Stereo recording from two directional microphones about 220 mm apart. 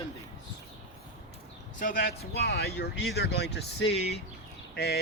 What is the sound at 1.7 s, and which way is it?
Speech, 40° left (ahead or behind).